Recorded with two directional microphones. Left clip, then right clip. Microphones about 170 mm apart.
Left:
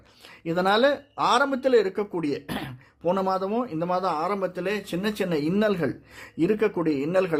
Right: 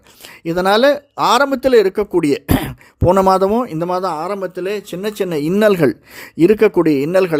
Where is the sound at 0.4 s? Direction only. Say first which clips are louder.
Right 9 dB; 35° right (ahead or behind).